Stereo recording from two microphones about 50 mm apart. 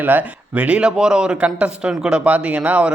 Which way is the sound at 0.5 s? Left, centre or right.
Right.